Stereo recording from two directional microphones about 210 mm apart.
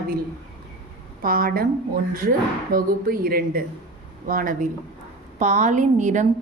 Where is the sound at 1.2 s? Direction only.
45° right (ahead or behind).